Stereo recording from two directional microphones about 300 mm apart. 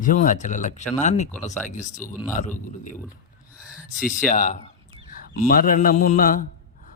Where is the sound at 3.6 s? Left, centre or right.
Centre.